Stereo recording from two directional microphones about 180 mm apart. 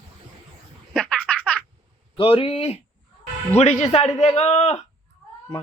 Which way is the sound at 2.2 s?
30° left (ahead or behind).